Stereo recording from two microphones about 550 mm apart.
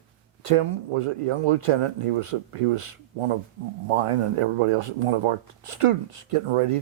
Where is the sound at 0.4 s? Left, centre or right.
Right.